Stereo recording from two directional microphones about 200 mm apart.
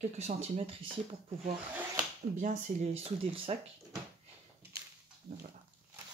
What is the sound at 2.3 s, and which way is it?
Speech, 35° right (ahead or behind).